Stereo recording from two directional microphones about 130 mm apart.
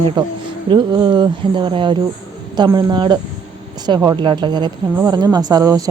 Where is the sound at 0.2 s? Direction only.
35° right (ahead or behind).